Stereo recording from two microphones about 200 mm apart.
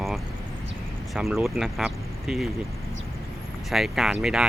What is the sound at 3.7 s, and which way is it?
Speech, centre (ahead or behind).